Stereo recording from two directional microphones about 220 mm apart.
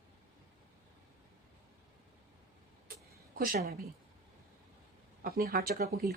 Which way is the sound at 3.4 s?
40° right (ahead or behind).